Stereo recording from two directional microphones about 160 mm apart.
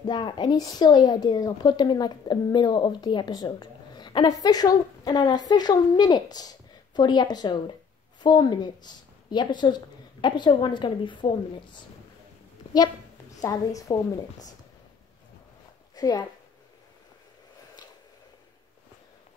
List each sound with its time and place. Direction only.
0.0 s a woman's voice: 25° left (ahead or behind)
13.4 s a woman's voice: 20° left (ahead or behind)
15.9 s a woman's voice: 25° left (ahead or behind)